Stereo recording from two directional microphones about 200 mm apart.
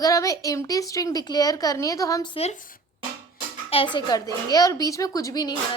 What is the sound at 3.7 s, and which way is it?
Speech, 30° left (ahead or behind).